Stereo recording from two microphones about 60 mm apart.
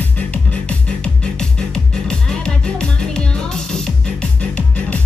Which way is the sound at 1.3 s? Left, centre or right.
Centre.